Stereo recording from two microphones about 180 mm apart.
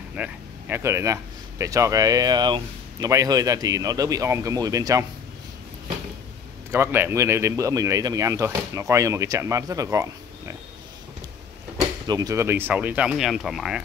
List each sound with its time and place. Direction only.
0.1 s speech: 10° right (ahead or behind)
6.7 s speech: 10° right (ahead or behind)
12.1 s speech: 20° right (ahead or behind); by 13.8 s 5° right (ahead or behind)